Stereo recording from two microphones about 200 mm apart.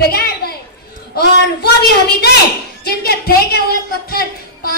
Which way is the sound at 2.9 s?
50° left (ahead or behind).